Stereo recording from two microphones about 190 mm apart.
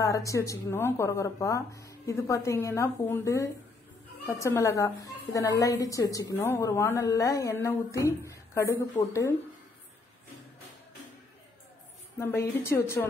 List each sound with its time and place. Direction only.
0.0 s a woman's voice: 15° left (ahead or behind)
12.2 s a woman's voice: 15° left (ahead or behind)